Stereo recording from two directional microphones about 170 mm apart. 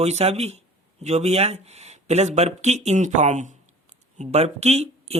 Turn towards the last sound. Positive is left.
turn(degrees=-40)  # may be behind; listen again after turning